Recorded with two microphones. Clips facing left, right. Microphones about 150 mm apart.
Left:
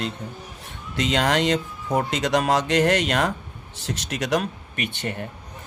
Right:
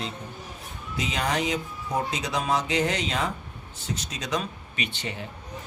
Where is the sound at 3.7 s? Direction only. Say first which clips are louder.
Left 4 dB; 90° left; by 5.2 s 55° left (ahead or behind).